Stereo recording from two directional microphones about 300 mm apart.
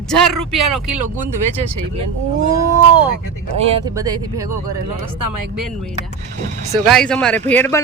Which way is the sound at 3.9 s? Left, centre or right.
Centre.